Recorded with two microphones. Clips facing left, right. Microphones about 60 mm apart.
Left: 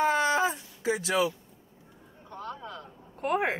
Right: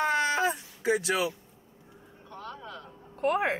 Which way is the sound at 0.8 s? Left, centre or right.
Centre.